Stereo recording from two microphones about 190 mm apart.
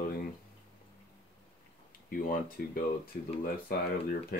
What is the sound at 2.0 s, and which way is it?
Speech, 50° left (ahead or behind).